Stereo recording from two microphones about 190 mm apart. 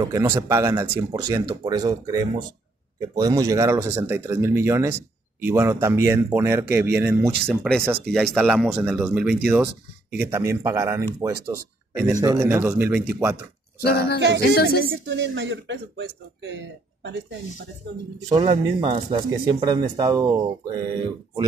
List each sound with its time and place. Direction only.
0.0 s speech: 20° right (ahead or behind)
7.4 s speech: 5° left (ahead or behind); by 13.4 s 10° right (ahead or behind)
13.8 s speech: 55° left (ahead or behind)
14.8 s speech: 80° right
18.3 s speech: 30° right (ahead or behind)